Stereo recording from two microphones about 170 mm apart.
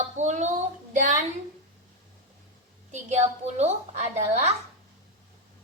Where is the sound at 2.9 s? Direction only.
40° right (ahead or behind).